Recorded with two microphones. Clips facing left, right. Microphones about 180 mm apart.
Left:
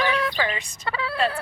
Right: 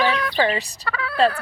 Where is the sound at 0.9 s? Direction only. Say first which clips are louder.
Left 1 dB; 25° left (ahead or behind).